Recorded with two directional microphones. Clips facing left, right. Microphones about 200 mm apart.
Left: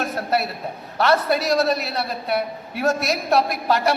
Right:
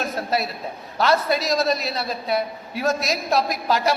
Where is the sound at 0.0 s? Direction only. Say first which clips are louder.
Left 1 dB; 60° left (ahead or behind).